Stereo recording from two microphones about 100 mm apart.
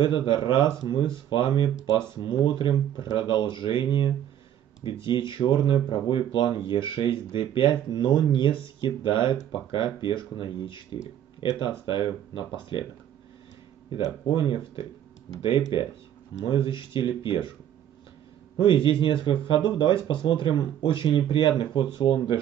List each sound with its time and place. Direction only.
0.0 s speech: 60° left (ahead or behind)
13.9 s speech: 60° left (ahead or behind)
18.6 s speech: 55° left (ahead or behind)